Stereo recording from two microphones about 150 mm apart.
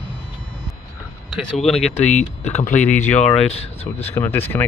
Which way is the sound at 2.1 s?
50° left (ahead or behind).